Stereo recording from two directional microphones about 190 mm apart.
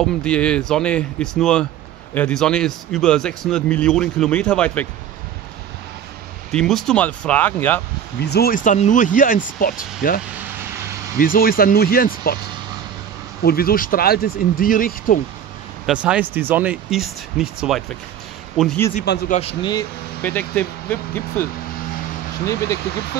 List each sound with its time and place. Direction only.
0.0 s a man's voice: 5° left (ahead or behind)
6.5 s speech: centre (ahead or behind)
8.2 s speech: 55° left (ahead or behind)
13.4 s speech: 55° left (ahead or behind)
15.8 s a man's voice: 5° right (ahead or behind)
19.2 s a man's voice: 40° left (ahead or behind)
19.6 s speech: 20° left (ahead or behind)